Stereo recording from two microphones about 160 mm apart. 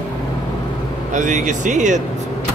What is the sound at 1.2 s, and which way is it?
Speech, 50° right (ahead or behind).